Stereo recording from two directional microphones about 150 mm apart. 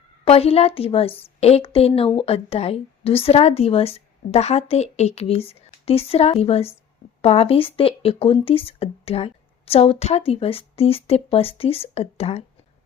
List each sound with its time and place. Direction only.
0.3 s speech: 40° left (ahead or behind)